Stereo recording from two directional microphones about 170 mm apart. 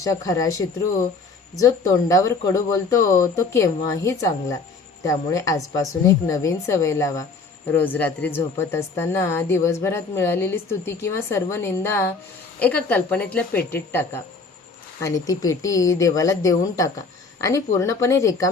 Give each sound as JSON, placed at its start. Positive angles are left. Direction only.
{"t": 0.0, "sound": "a woman's voice", "side_deg": 20}